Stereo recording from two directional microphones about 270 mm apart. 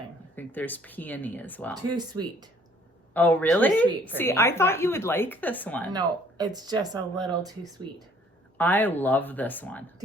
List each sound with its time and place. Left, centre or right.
0.3 s a woman's voice: centre
1.9 s speech: centre
3.1 s a woman's voice: centre
5.9 s speech: centre
8.5 s a woman's voice: centre